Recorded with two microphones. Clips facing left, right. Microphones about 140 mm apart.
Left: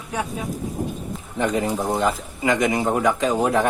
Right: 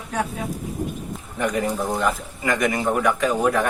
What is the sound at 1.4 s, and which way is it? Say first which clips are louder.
Speech: left 1 dB; 25° left (ahead or behind).